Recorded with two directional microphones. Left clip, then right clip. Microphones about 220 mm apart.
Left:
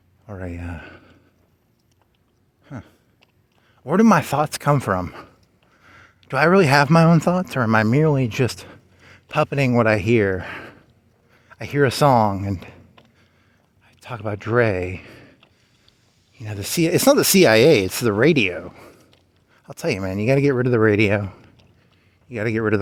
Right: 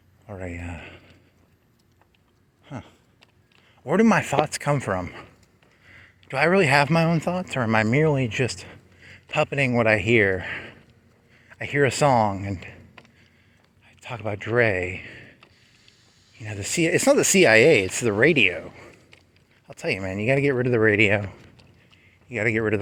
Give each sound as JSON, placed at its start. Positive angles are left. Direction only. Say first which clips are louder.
{"t": 0.3, "sound": "speech", "louder": "left 2 dB", "side_deg": 40}
{"t": 2.6, "sound": "a man's voice", "louder": "even", "side_deg": 40}
{"t": 7.5, "sound": "speech", "louder": "even", "side_deg": 40}
{"t": 13.8, "sound": "speech", "louder": "left 2 dB", "side_deg": 40}
{"t": 19.6, "sound": "speech", "louder": "left 3 dB", "side_deg": 55}